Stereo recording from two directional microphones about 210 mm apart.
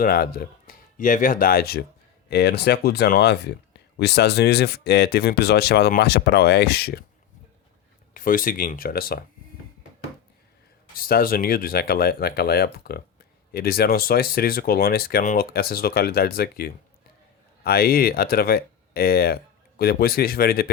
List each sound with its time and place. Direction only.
0.0 s speech: 45° left (ahead or behind)
8.1 s speech: 40° left (ahead or behind)
10.9 s speech: 45° left (ahead or behind)